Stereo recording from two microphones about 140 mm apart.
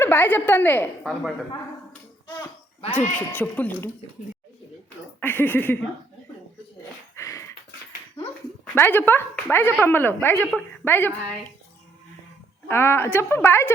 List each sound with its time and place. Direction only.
0.0 s a woman's voice: 15° left (ahead or behind)
1.0 s speech: centre (ahead or behind)
3.2 s a woman's voice: 10° left (ahead or behind)
5.2 s a woman's voice: 15° left (ahead or behind)
7.2 s dog: 20° left (ahead or behind)
8.7 s a woman's voice: 15° left (ahead or behind)
12.6 s a woman's voice: 15° left (ahead or behind)